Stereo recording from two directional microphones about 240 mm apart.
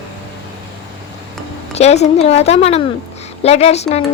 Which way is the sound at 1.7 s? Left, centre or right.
Left.